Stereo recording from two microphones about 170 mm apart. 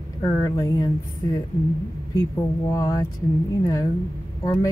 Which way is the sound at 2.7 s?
20° left (ahead or behind).